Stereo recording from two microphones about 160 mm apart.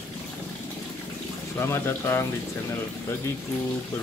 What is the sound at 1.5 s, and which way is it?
Speech, 15° left (ahead or behind).